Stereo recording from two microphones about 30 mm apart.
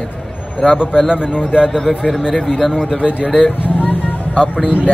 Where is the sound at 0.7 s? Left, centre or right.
Right.